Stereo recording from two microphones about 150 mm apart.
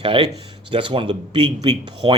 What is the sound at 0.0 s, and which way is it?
Speech, 35° right (ahead or behind).